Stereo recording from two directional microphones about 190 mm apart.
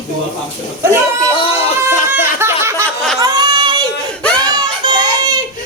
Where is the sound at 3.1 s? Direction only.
20° right (ahead or behind).